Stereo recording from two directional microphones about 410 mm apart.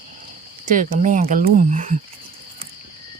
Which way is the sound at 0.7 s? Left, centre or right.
Centre.